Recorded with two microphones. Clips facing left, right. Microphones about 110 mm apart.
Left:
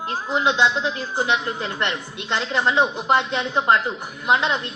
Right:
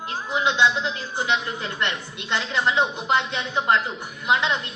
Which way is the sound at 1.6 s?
25° left (ahead or behind).